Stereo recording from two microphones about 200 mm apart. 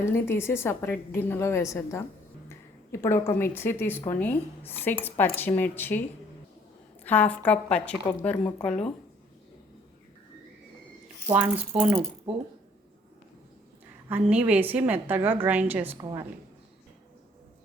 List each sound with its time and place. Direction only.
0.0 s a woman's voice: 10° left (ahead or behind)
7.0 s a woman's voice: 10° left (ahead or behind)
11.7 s a woman's voice: 5° right (ahead or behind)
14.1 s a woman's voice: 5° right (ahead or behind)